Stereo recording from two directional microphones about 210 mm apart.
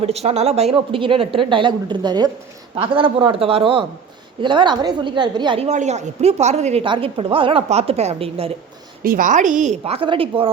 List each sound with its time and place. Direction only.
0.0 s a woman's voice: 30° right (ahead or behind)
9.0 s a woman's voice: 40° right (ahead or behind)